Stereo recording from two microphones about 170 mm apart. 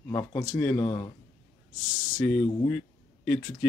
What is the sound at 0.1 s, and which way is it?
Speech, 15° left (ahead or behind).